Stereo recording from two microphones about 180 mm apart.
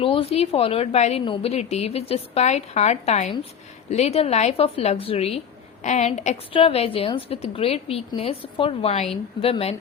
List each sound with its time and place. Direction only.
0.0 s a woman's voice: 30° left (ahead or behind)